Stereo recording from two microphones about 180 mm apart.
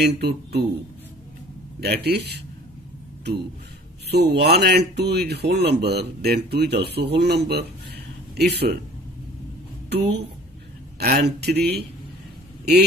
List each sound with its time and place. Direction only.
0.1 s speech: 65° right (ahead or behind)
1.8 s speech: 65° right (ahead or behind)
4.1 s speech: 65° right (ahead or behind)
9.8 s speech: 70° right (ahead or behind)